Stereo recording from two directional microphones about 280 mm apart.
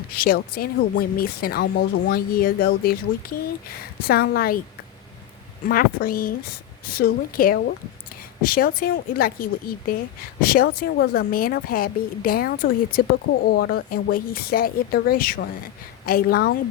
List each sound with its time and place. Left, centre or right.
0.1 s speech: left
5.6 s speech: left